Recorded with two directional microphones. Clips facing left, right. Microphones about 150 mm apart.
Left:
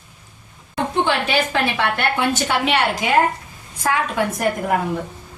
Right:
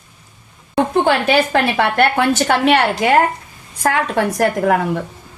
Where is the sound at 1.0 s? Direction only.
50° right (ahead or behind).